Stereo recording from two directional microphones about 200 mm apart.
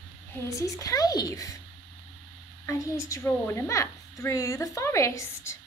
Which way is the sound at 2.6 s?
15° left (ahead or behind).